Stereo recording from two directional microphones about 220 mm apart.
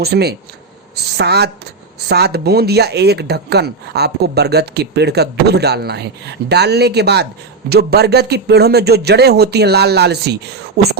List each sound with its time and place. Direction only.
0.0 s speech: 45° right (ahead or behind)